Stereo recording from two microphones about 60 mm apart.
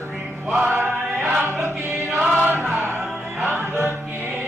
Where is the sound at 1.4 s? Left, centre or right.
Right.